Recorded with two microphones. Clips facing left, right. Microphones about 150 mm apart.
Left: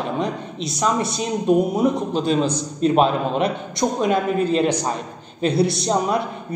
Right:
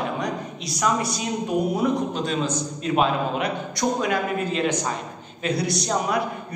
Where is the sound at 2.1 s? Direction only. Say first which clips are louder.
Left 5 dB; 30° left (ahead or behind).